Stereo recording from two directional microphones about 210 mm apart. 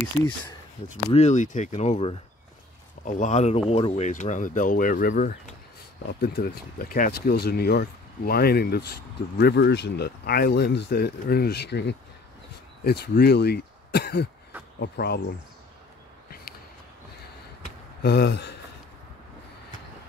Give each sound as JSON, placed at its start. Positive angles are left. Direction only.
{"t": 1.1, "sound": "speech", "side_deg": 35}
{"t": 18.0, "sound": "speech", "side_deg": 50}